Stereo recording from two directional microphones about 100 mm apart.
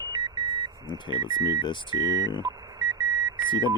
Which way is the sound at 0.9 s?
50° left (ahead or behind).